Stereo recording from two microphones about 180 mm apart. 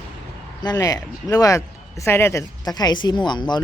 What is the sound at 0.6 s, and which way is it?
Speech, 20° left (ahead or behind).